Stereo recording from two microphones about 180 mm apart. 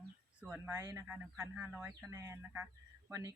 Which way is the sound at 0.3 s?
5° right (ahead or behind).